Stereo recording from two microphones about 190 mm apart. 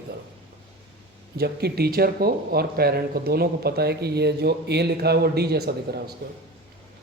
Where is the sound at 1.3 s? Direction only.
55° right (ahead or behind).